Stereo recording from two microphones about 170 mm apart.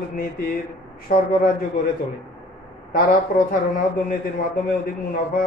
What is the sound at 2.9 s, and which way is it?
Speech, 55° left (ahead or behind).